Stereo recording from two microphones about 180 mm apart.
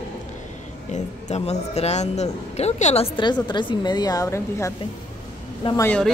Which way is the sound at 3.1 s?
25° left (ahead or behind).